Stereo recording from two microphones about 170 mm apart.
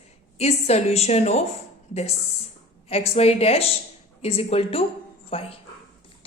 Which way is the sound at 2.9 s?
35° left (ahead or behind).